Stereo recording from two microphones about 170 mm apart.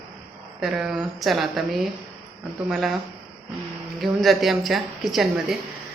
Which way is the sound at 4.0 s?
Centre (ahead or behind).